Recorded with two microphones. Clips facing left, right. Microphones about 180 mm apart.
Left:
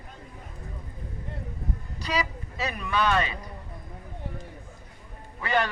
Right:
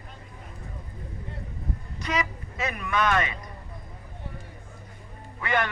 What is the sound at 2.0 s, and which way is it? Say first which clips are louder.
A woman's voice: even; 35° left (ahead or behind).